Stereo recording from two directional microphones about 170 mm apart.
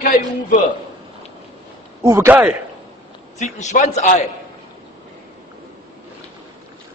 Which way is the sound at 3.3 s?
45° left (ahead or behind).